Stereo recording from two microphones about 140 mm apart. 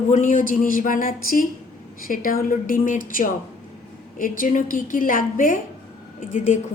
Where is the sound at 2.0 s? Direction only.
90° left.